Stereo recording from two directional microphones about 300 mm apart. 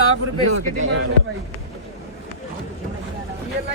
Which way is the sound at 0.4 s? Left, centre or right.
Right.